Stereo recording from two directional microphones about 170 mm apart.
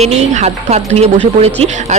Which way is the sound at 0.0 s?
40° right (ahead or behind).